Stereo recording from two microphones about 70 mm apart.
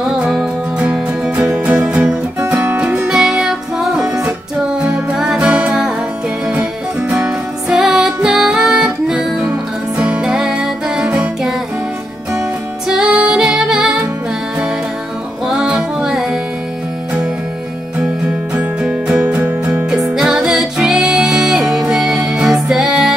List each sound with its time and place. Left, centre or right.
0.0 s music: centre
2.4 s music: right
2.8 s music: centre
9.9 s music: centre
15.4 s music: centre
17.9 s music: centre
20.2 s music: centre